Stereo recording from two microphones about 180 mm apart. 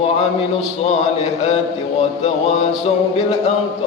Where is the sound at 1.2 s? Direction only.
35° left (ahead or behind).